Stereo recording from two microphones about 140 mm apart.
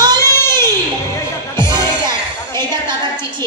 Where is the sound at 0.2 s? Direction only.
20° left (ahead or behind).